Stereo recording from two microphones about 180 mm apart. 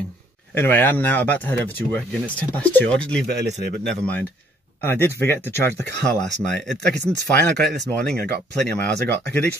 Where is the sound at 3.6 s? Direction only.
65° right (ahead or behind).